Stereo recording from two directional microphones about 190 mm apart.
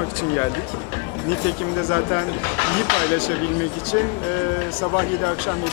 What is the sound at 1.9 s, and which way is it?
Speech, 15° left (ahead or behind).